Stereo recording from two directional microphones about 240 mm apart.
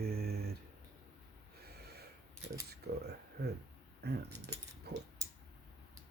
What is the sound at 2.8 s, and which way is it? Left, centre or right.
Speech, right.